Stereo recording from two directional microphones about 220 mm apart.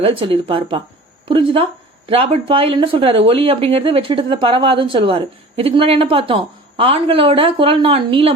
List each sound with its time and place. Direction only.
0.0 s speech: 25° right (ahead or behind)